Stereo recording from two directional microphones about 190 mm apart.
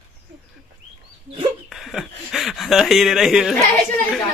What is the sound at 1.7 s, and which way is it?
Speech, centre (ahead or behind).